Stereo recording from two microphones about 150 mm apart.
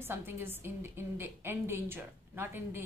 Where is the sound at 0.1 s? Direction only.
15° right (ahead or behind).